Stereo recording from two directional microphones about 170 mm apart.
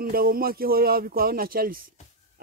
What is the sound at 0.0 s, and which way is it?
Speech, 60° right (ahead or behind).